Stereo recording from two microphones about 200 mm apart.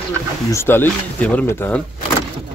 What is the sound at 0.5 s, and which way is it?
Speech, 10° left (ahead or behind).